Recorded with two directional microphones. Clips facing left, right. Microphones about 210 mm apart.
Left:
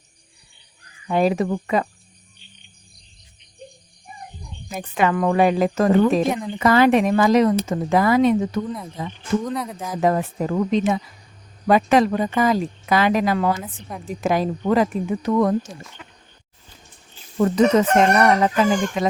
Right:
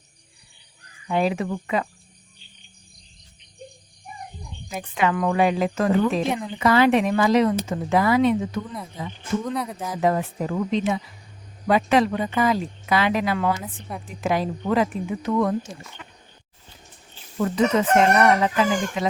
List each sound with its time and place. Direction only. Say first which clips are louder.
1.0 s speech: left 4 dB; 40° left (ahead or behind)
4.9 s speech: left 3 dB; 40° left (ahead or behind)
9.4 s speech: left 1 dB; centre (ahead or behind)
10.0 s speech: left 2 dB; 45° left (ahead or behind)
13.6 s speech: left 1 dB; centre (ahead or behind)
14.2 s speech: left 3 dB; 45° left (ahead or behind)
17.4 s speech: left 4 dB; 40° left (ahead or behind)